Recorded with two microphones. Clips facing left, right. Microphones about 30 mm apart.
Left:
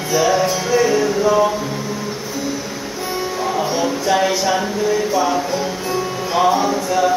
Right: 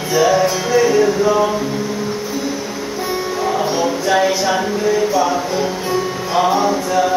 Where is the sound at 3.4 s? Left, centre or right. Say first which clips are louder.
Right 2 dB; centre.